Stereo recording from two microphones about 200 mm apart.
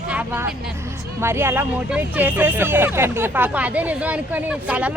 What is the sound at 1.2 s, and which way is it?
Speech, 10° right (ahead or behind).